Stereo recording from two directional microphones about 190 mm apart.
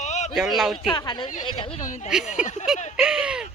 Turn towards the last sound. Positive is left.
turn(degrees=-5)  # may be behind; listen again after turning